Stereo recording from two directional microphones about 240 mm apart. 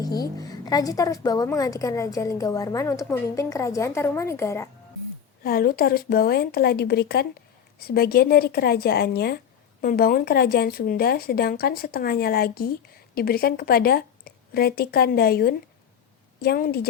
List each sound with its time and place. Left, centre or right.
0.0 s a woman's voice: centre
5.4 s a woman's voice: left